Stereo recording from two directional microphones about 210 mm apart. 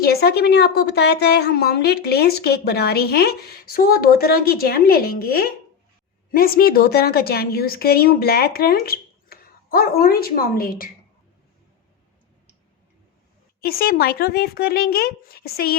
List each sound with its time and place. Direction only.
0.0 s a woman's voice: 45° left (ahead or behind)
13.6 s a woman's voice: 45° left (ahead or behind)